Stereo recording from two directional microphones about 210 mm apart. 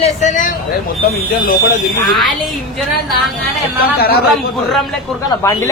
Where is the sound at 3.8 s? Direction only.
45° left (ahead or behind).